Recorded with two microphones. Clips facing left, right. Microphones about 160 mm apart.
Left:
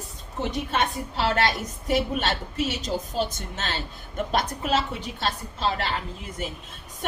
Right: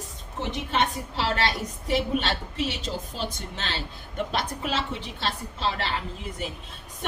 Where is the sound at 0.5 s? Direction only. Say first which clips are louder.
Right 1 dB; 45° left (ahead or behind).